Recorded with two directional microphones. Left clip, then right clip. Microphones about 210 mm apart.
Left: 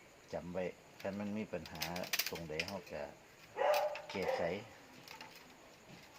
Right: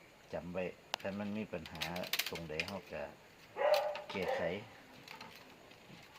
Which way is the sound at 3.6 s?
45° left (ahead or behind).